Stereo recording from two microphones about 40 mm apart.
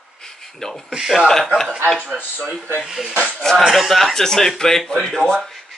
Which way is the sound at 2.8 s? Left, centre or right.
Centre.